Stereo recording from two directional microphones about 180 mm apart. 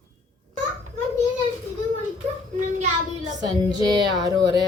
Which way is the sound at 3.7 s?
25° right (ahead or behind).